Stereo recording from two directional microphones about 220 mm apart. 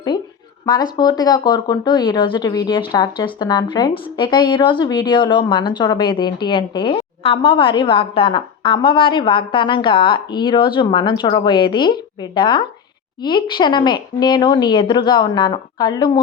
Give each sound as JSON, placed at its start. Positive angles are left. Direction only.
{"t": 0.6, "sound": "speech", "side_deg": 20}